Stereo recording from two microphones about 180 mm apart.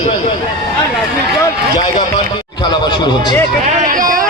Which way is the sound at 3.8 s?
50° right (ahead or behind).